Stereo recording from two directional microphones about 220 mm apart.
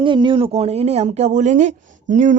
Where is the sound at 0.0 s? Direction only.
20° right (ahead or behind).